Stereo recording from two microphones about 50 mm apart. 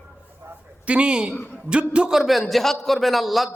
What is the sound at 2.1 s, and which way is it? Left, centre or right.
A man's voice, centre.